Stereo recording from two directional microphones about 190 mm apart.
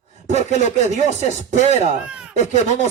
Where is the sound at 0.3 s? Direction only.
35° right (ahead or behind).